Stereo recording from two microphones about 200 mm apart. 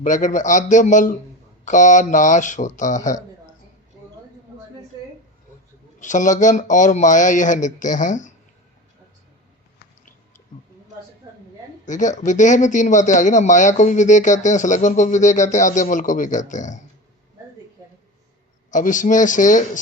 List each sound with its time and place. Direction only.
0.0 s a man's voice: 40° left (ahead or behind)
6.0 s a man's voice: 40° left (ahead or behind)
11.9 s a man's voice: 40° left (ahead or behind)
18.7 s a man's voice: 40° left (ahead or behind)